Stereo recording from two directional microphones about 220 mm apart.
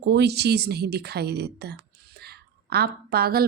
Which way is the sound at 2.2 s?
45° right (ahead or behind).